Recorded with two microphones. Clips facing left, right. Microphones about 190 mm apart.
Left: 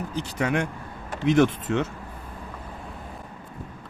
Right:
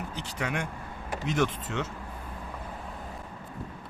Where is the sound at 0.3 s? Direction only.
50° left (ahead or behind).